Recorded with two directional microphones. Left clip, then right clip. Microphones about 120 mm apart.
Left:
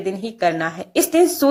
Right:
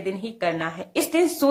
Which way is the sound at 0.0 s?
25° left (ahead or behind).